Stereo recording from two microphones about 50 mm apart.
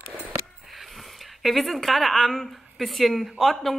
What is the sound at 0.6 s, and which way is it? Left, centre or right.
Speech, centre.